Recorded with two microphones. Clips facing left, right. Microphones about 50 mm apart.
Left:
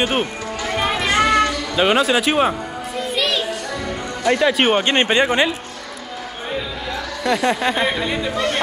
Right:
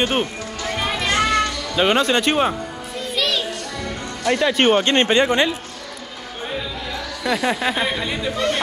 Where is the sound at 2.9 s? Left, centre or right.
Centre.